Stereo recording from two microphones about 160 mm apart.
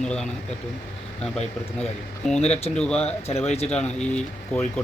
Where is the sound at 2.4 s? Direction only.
40° left (ahead or behind).